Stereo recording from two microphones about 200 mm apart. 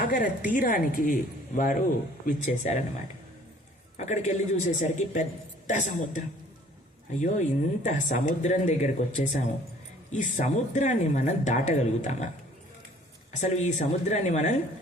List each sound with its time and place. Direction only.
0.0 s a woman's voice: 45° left (ahead or behind)
3.9 s speech: 35° left (ahead or behind)
13.3 s speech: 35° left (ahead or behind)